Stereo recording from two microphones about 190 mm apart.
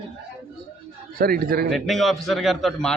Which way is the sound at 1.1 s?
55° right (ahead or behind).